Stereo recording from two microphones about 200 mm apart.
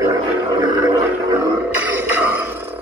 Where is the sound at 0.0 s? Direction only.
20° right (ahead or behind).